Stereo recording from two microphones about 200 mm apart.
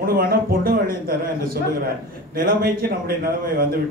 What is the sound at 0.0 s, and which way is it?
A man's voice, 45° right (ahead or behind).